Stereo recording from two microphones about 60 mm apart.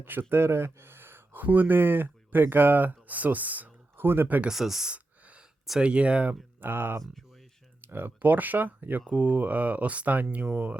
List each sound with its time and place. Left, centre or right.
0.0 s speech: right
4.4 s speech: centre
5.8 s speech: centre
6.6 s speech: right